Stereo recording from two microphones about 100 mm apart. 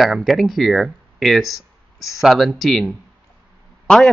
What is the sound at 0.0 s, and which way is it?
Speech, centre (ahead or behind).